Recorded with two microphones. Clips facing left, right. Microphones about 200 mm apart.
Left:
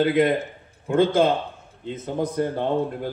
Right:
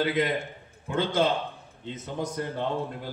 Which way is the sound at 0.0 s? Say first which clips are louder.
Left 7 dB; 55° left (ahead or behind).